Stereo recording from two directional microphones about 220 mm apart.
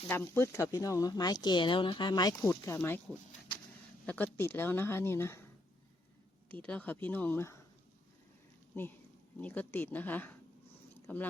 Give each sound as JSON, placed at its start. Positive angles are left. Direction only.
{"t": 0.1, "sound": "speech", "side_deg": 10}
{"t": 4.0, "sound": "speech", "side_deg": 5}
{"t": 6.5, "sound": "speech", "side_deg": 5}
{"t": 9.4, "sound": "speech", "side_deg": 10}
{"t": 11.0, "sound": "a sound", "side_deg": 10}